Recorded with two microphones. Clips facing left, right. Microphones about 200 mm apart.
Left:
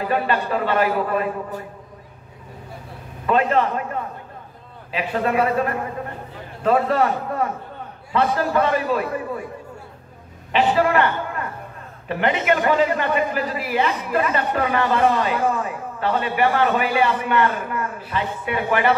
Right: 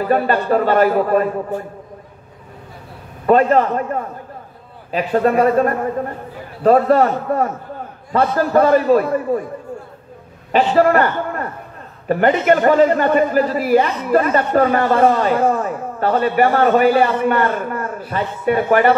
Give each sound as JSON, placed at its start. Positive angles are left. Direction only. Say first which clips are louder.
{"t": 0.1, "sound": "a man's voice", "louder": "right 7 dB", "side_deg": -45}
{"t": 3.3, "sound": "a man's voice", "louder": "right 6 dB", "side_deg": -45}
{"t": 10.5, "sound": "a man's voice", "louder": "right 5 dB", "side_deg": -45}